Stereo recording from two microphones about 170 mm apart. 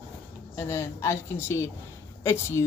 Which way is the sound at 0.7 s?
15° left (ahead or behind).